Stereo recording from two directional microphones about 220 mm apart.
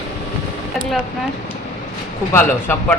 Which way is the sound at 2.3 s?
10° left (ahead or behind).